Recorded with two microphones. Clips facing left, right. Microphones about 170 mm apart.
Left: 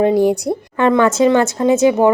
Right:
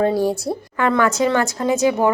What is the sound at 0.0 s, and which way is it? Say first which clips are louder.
A woman's voice: left 5 dB; 20° left (ahead or behind).